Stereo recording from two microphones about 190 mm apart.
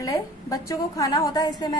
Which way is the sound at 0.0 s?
20° left (ahead or behind).